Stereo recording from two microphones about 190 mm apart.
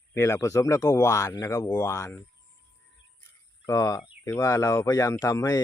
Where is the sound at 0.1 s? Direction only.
15° left (ahead or behind).